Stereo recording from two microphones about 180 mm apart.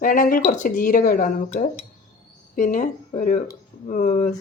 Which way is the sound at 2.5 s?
45° left (ahead or behind).